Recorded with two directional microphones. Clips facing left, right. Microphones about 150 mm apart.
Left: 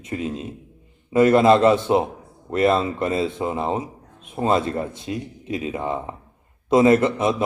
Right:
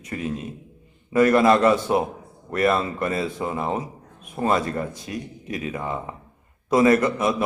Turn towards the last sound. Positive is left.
turn(degrees=25)  # may be behind; listen again after turning